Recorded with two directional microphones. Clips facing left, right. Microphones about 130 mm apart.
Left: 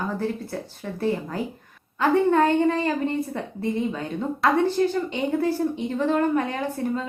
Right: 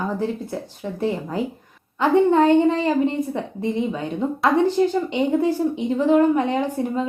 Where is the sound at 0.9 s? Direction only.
15° right (ahead or behind).